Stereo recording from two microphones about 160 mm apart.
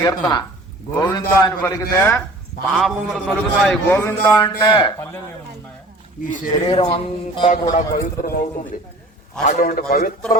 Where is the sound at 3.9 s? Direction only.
15° left (ahead or behind).